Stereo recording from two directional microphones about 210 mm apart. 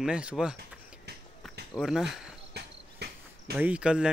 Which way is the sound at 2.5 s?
50° right (ahead or behind).